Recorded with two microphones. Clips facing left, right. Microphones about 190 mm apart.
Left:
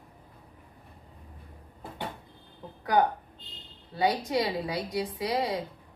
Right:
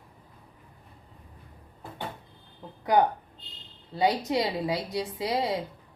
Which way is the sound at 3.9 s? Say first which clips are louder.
Right 1 dB; 25° right (ahead or behind).